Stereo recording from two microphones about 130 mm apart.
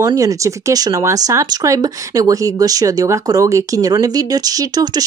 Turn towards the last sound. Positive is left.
turn(degrees=-30)  # may be behind; listen again after turning